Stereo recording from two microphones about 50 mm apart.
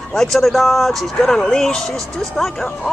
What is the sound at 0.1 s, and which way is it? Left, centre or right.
Speech, centre.